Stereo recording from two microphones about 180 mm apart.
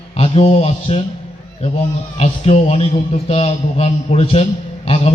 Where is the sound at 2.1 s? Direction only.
35° left (ahead or behind).